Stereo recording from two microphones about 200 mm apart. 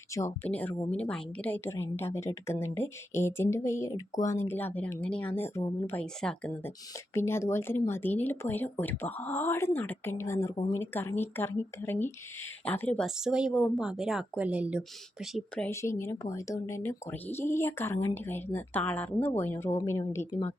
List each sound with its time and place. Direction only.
0.1 s speech: 15° left (ahead or behind)